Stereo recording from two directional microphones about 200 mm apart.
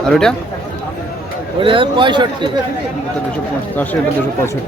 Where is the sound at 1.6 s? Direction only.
25° right (ahead or behind).